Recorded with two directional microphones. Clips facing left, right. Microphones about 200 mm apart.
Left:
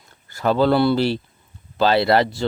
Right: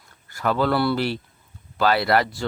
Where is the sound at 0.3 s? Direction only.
25° left (ahead or behind).